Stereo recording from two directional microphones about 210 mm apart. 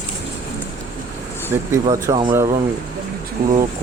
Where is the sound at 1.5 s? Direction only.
15° right (ahead or behind).